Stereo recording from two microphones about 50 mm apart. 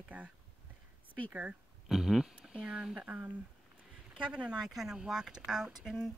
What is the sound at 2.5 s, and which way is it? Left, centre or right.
Speech, right.